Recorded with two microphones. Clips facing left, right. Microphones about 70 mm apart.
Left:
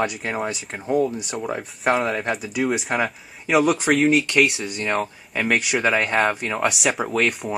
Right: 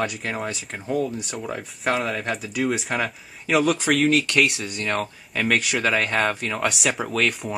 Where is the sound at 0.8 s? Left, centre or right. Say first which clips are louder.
Left 4 dB; centre.